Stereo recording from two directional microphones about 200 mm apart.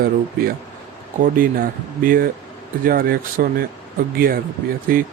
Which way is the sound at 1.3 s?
45° right (ahead or behind).